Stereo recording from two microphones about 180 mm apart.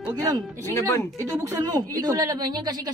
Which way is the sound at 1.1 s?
15° right (ahead or behind).